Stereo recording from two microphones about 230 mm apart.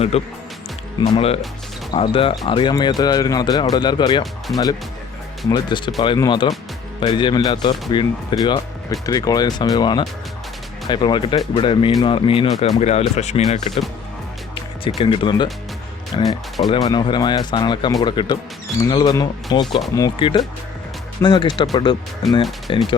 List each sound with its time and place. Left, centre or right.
0.1 s speech: left
14.8 s speech: left
22.7 s speech: left